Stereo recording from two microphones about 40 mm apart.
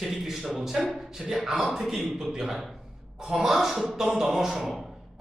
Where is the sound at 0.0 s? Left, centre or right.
Centre.